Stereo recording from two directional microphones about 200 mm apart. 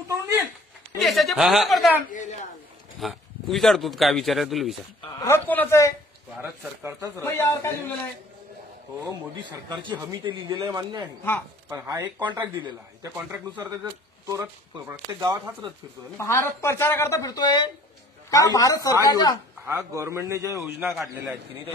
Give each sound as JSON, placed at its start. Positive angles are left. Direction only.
{"t": 0.1, "sound": "a sound", "side_deg": -10}
{"t": 0.9, "sound": "speech", "side_deg": 0}
{"t": 3.0, "sound": "speech", "side_deg": 0}
{"t": 5.2, "sound": "speech", "side_deg": 10}
{"t": 6.4, "sound": "a man's voice", "side_deg": -10}
{"t": 7.2, "sound": "speech", "side_deg": 15}
{"t": 9.0, "sound": "a man's voice", "side_deg": -20}
{"t": 13.1, "sound": "a man's voice", "side_deg": -10}
{"t": 16.2, "sound": "speech", "side_deg": 15}
{"t": 19.6, "sound": "a man's voice", "side_deg": -10}